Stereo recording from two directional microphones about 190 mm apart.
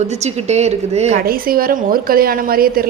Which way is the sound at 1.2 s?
50° right (ahead or behind).